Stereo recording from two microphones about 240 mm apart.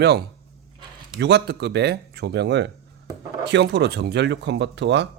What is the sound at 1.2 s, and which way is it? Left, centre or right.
Speech, right.